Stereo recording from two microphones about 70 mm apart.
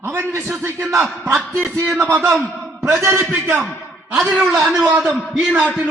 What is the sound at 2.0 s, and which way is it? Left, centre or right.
Speech, right.